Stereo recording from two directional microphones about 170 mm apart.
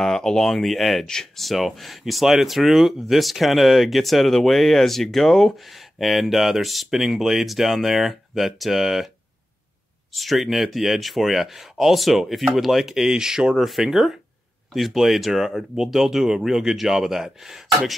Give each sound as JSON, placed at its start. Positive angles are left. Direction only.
{"t": 0.0, "sound": "speech", "side_deg": 5}
{"t": 10.1, "sound": "speech", "side_deg": 0}